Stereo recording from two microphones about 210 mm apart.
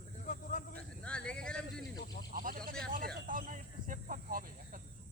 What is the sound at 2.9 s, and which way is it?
Snake, 40° right (ahead or behind).